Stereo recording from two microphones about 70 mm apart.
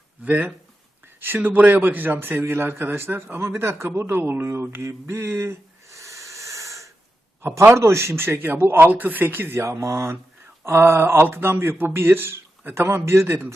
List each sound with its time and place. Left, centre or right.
0.3 s speech: right
1.0 s a sound: right
1.4 s a man's voice: right
7.4 s speech: right